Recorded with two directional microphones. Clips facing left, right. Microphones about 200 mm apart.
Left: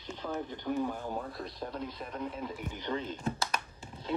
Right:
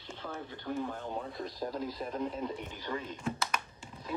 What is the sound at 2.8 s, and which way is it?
Speech, 20° left (ahead or behind).